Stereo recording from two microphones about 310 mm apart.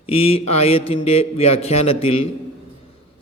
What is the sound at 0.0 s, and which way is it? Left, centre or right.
A man's voice, centre.